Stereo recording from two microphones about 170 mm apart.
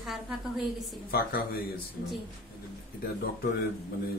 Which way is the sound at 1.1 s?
65° left (ahead or behind).